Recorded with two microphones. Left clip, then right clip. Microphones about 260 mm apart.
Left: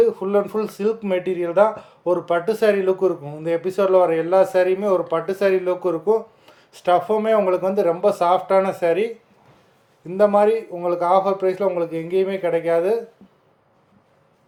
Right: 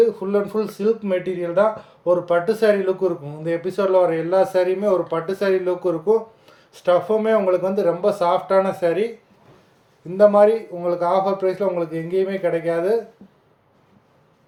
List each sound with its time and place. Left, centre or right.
0.0 s speech: centre
10.2 s speech: centre